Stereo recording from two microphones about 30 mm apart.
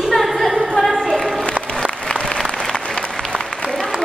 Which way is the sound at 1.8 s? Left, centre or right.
Left.